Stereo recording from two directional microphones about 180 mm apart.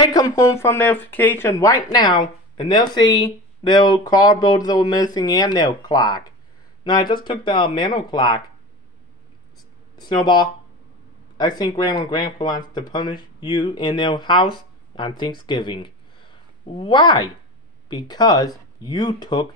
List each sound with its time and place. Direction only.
0.0 s speech: 20° left (ahead or behind)
9.9 s speech: 25° left (ahead or behind)